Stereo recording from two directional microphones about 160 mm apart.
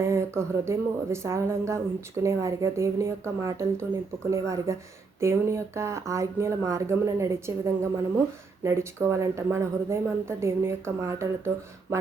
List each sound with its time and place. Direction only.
0.0 s speech: 15° right (ahead or behind)